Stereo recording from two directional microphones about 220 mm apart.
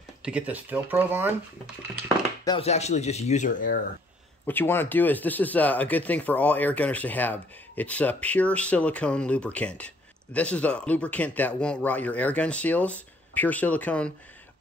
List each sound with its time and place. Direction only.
0.2 s speech: 5° right (ahead or behind)
2.4 s speech: 25° left (ahead or behind)
4.5 s speech: 10° left (ahead or behind)